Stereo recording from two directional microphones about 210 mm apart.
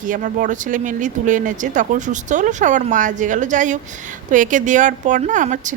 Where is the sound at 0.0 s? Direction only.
40° right (ahead or behind).